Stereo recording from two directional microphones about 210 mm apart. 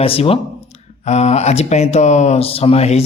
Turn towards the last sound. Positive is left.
turn(degrees=30)  # may be behind; listen again after turning